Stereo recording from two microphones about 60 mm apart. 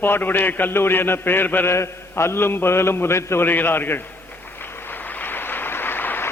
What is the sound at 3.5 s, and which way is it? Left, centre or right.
Speech, left.